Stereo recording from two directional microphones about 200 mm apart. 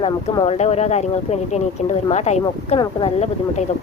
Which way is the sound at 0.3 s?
30° left (ahead or behind).